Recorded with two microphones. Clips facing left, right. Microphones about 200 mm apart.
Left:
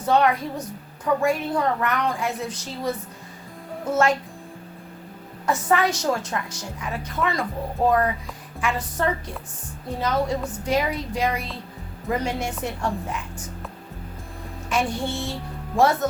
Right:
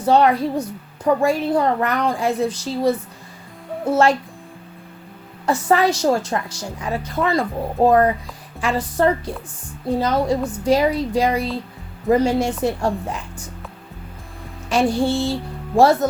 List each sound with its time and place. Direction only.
0.0 s a woman's voice: 30° right (ahead or behind)
5.5 s a woman's voice: 35° right (ahead or behind)
14.7 s speech: 35° right (ahead or behind)